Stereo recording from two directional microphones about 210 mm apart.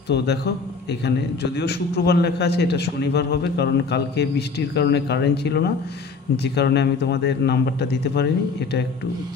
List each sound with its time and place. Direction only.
0.1 s a man's voice: 50° left (ahead or behind)